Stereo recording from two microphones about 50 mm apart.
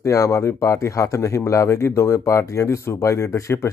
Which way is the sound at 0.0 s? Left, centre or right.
Left.